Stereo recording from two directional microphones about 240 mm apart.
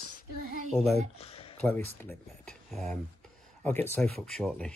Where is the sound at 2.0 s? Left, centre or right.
Centre.